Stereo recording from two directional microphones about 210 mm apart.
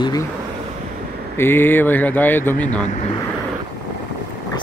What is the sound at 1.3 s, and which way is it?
Speech, 10° left (ahead or behind).